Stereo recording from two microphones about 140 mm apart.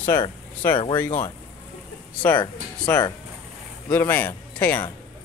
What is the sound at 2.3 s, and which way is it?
Speech, 35° left (ahead or behind).